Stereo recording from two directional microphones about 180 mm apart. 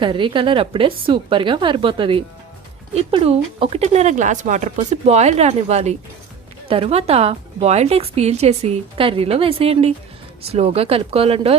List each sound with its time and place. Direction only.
0.0 s a woman's voice: 25° right (ahead or behind)